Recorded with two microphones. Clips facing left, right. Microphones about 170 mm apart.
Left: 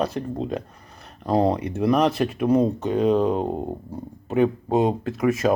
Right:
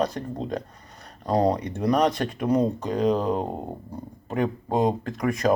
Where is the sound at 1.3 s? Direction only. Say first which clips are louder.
Left 2 dB; 25° left (ahead or behind).